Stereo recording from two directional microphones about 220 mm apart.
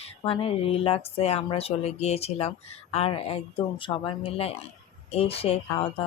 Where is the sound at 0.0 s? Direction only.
25° left (ahead or behind).